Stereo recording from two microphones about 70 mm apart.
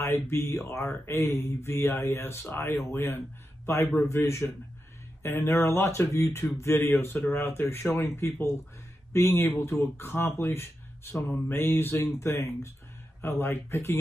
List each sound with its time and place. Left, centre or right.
0.0 s speech: left